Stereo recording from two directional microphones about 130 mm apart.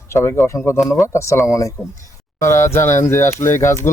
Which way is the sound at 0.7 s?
Centre (ahead or behind).